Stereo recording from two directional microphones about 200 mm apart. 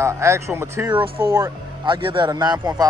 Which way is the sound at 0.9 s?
25° right (ahead or behind).